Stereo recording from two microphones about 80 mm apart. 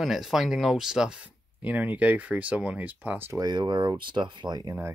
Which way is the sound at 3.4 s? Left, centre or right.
Right.